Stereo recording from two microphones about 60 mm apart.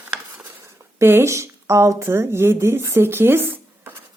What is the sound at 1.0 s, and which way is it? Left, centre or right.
A woman's voice, right.